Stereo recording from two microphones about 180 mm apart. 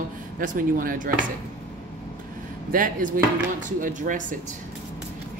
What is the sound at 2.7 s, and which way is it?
Speech, 50° right (ahead or behind).